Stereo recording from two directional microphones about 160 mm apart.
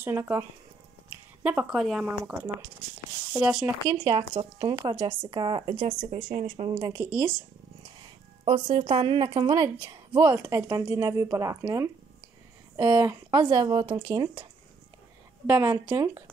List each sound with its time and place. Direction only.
0.0 s speech: 15° right (ahead or behind)
3.9 s a woman's voice: 30° right (ahead or behind)
5.8 s speech: 45° right (ahead or behind)
6.7 s speech: 20° right (ahead or behind)
8.5 s a woman's voice: 35° right (ahead or behind)
9.8 s a woman's voice: 15° right (ahead or behind)
12.9 s a woman's voice: 20° right (ahead or behind)
15.4 s a woman's voice: 10° right (ahead or behind)